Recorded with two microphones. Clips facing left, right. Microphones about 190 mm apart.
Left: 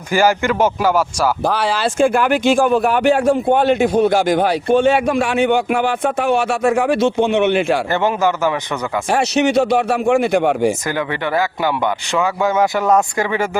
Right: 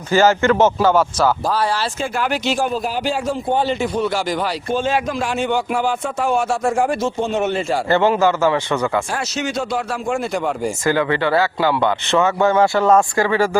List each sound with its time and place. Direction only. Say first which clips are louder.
0.1 s speech: right 1 dB; 10° left (ahead or behind)
1.5 s speech: left 1 dB; 80° left
2.0 s speech: left 7 dB; 55° left (ahead or behind)
2.7 s a man's voice: left 7 dB; 65° left (ahead or behind)
7.9 s speech: right 2 dB; 15° left (ahead or behind)
9.0 s a man's voice: left 8 dB; 70° left (ahead or behind)
10.8 s speech: right 3 dB; 15° left (ahead or behind)